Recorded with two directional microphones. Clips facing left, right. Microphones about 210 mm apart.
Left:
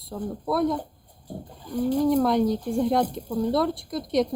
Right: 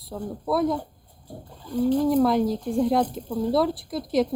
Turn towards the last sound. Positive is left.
turn(degrees=0)  # may be behind; listen again after turning